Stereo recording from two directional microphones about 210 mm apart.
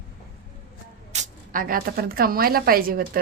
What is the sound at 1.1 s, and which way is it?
Speech, 35° right (ahead or behind).